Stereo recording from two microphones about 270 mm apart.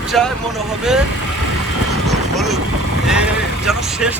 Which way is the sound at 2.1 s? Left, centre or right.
Centre.